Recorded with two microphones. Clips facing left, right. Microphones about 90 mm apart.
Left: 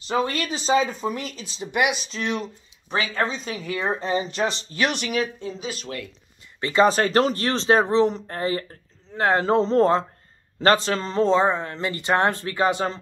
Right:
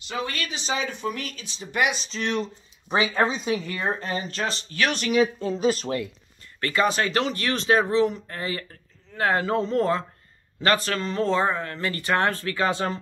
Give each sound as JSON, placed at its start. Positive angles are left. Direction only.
{"t": 0.1, "sound": "speech", "side_deg": 30}
{"t": 2.9, "sound": "speech", "side_deg": -20}
{"t": 3.5, "sound": "speech", "side_deg": 5}
{"t": 4.0, "sound": "speech", "side_deg": 20}
{"t": 4.9, "sound": "speech", "side_deg": 5}
{"t": 5.4, "sound": "speech", "side_deg": -45}
{"t": 6.6, "sound": "speech", "side_deg": 25}
{"t": 6.9, "sound": "speech", "side_deg": 35}